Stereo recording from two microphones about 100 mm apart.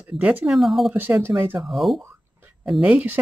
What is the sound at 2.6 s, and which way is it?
Speech, 10° right (ahead or behind).